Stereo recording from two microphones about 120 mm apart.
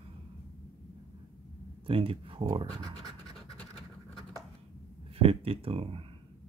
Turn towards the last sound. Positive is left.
turn(degrees=-50)  # may be behind; listen again after turning